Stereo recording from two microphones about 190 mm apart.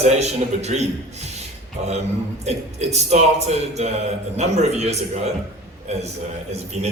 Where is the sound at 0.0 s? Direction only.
35° right (ahead or behind).